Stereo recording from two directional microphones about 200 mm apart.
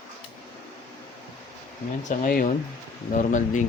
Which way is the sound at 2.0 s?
40° left (ahead or behind).